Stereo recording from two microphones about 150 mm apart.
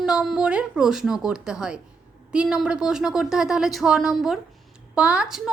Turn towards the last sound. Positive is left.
turn(degrees=-5)  # may be behind; listen again after turning